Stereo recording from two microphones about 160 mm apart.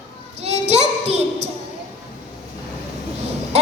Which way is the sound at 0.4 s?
40° right (ahead or behind).